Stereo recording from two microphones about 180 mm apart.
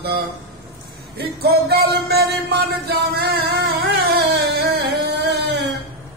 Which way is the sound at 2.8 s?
65° right (ahead or behind).